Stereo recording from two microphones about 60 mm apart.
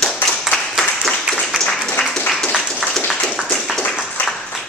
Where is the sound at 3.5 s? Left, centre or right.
Centre.